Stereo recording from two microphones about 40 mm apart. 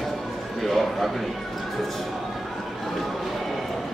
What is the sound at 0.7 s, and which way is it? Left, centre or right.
Speech, centre.